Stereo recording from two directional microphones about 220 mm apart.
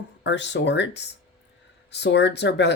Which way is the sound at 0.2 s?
55° left (ahead or behind).